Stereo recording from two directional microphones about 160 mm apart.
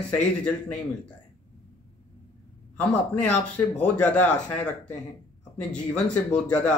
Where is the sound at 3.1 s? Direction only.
10° left (ahead or behind).